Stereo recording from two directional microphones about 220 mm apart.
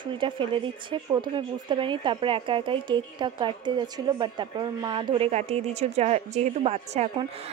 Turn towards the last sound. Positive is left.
turn(degrees=-25)  # may be behind; listen again after turning